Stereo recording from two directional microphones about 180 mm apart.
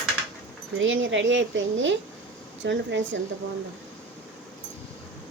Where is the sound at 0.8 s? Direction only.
90° right.